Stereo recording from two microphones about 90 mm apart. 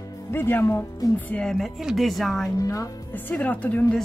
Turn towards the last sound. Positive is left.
turn(degrees=15)  # may be behind; listen again after turning